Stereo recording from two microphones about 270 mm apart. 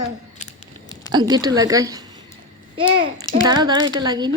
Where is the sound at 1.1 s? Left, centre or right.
Centre.